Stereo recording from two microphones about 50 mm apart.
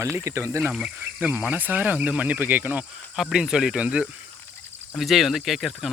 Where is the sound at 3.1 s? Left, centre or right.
Centre.